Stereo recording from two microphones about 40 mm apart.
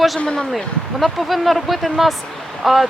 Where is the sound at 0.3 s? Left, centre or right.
Centre.